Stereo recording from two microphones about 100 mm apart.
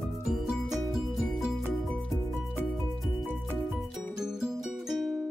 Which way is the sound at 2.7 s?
Centre (ahead or behind).